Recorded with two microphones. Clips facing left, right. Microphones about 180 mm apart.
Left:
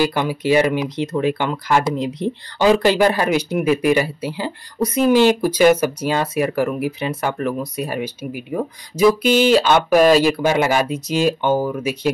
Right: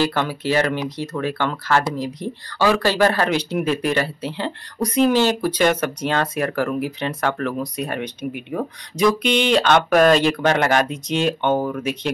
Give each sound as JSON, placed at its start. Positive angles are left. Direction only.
{"t": 0.0, "sound": "speech", "side_deg": 10}